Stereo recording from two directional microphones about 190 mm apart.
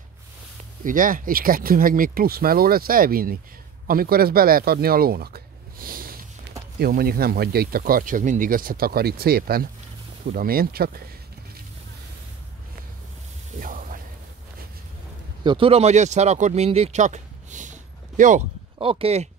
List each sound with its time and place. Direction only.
0.8 s speech: 45° right (ahead or behind)
13.6 s music: 45° right (ahead or behind)
15.4 s speech: 30° right (ahead or behind)
18.8 s speech: 30° right (ahead or behind)